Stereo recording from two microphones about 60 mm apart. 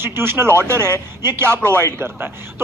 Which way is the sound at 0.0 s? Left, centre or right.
Right.